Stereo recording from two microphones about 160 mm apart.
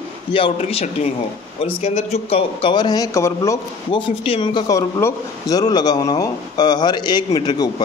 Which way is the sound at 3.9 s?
35° left (ahead or behind).